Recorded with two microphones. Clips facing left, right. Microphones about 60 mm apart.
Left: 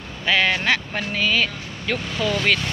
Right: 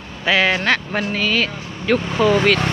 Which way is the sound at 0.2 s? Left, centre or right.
Centre.